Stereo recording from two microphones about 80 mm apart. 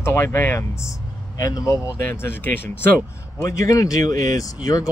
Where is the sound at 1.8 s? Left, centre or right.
Left.